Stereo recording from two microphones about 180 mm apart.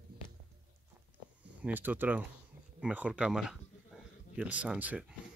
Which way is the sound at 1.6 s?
10° right (ahead or behind).